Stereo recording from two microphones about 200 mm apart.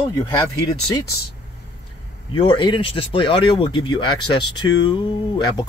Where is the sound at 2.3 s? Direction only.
25° left (ahead or behind).